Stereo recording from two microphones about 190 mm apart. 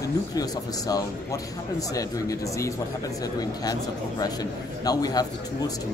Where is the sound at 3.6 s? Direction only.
20° left (ahead or behind).